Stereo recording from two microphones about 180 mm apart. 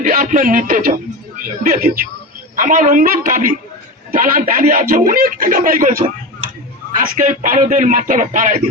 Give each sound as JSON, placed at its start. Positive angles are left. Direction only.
{"t": 0.0, "sound": "a man's voice", "side_deg": -50}